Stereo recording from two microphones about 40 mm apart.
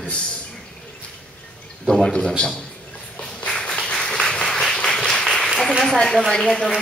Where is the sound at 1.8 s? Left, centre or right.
Centre.